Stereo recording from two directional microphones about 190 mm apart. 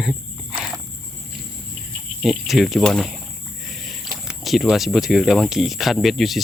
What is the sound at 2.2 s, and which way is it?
Speech, centre (ahead or behind).